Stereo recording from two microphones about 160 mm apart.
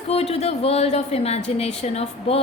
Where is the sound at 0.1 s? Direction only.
40° left (ahead or behind).